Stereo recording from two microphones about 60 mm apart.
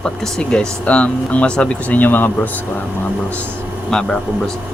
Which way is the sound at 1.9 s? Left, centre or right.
Left.